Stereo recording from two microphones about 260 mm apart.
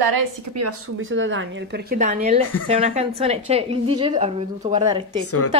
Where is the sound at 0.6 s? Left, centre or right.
Right.